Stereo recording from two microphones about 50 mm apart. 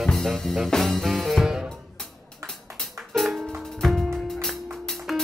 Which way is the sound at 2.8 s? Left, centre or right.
Centre.